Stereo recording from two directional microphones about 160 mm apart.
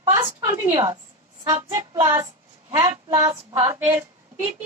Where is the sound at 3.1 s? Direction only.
20° right (ahead or behind).